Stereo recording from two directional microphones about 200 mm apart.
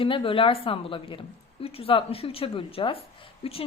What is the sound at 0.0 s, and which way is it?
A woman's voice, 25° left (ahead or behind).